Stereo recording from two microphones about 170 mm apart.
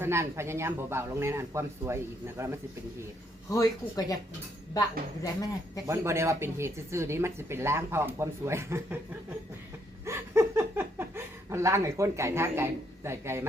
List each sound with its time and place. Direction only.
0.0 s speech: 15° right (ahead or behind)
3.5 s speech: 20° left (ahead or behind)
5.8 s speech: 15° right (ahead or behind)
10.1 s a sound: 15° right (ahead or behind)